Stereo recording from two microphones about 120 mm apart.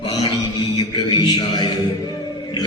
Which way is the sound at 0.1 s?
35° left (ahead or behind).